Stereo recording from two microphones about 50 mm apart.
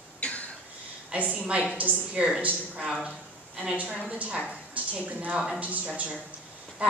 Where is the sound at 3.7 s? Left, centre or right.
Right.